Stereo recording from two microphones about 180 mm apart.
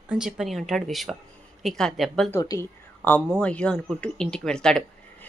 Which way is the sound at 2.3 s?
15° left (ahead or behind).